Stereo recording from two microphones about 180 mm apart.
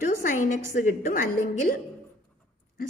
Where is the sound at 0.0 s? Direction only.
50° left (ahead or behind).